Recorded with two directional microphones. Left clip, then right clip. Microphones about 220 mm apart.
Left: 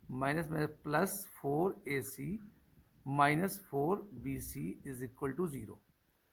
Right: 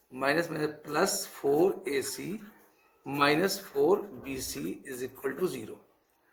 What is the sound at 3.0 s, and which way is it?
Speech, 40° left (ahead or behind).